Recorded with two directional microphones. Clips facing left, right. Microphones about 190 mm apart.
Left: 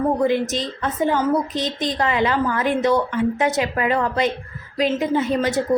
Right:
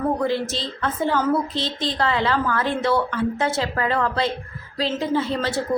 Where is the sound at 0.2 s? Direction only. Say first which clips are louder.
Left 4 dB; 20° left (ahead or behind).